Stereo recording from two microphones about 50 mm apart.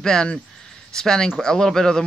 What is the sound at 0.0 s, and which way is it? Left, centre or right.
Speech, centre.